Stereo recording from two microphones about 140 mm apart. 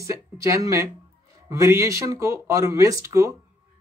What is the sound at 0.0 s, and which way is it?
Speech, 20° right (ahead or behind).